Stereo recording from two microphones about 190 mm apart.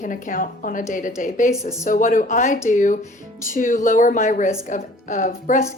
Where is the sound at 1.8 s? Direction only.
45° left (ahead or behind).